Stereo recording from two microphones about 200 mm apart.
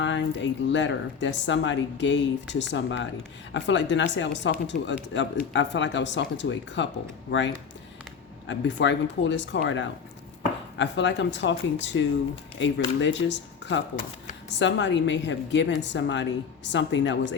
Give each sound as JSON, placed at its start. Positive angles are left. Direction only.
{"t": 0.0, "sound": "speech", "side_deg": 65}